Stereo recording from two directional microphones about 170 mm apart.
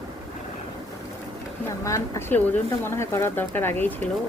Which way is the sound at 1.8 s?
15° left (ahead or behind).